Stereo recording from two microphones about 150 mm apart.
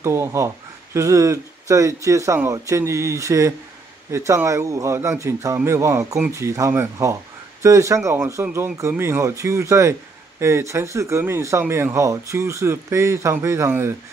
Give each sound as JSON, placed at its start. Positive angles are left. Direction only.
{"t": 0.0, "sound": "speech", "side_deg": -20}